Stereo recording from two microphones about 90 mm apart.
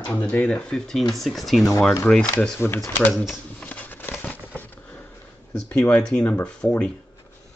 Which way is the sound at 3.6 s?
20° left (ahead or behind).